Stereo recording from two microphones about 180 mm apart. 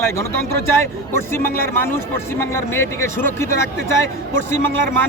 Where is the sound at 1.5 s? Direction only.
15° left (ahead or behind).